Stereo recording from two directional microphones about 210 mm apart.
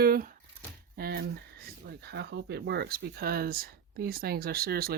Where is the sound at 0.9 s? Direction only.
45° right (ahead or behind).